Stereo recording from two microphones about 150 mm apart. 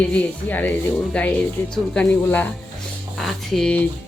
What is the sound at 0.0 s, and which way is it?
Speech, 10° left (ahead or behind).